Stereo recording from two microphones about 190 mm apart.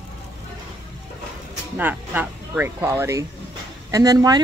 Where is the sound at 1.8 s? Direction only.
10° right (ahead or behind).